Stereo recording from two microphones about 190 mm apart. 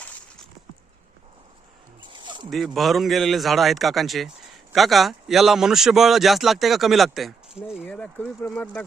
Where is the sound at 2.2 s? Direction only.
25° right (ahead or behind).